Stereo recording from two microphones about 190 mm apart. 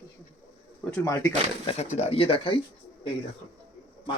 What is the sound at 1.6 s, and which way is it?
Speech, 35° left (ahead or behind).